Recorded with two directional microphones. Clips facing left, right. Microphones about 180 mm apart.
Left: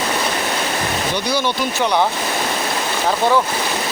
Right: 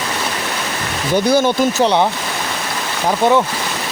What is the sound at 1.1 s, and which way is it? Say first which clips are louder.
Speech: right 10 dB; 45° right (ahead or behind).